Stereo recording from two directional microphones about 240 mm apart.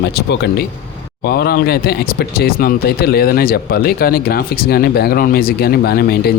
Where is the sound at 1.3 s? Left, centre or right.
Left.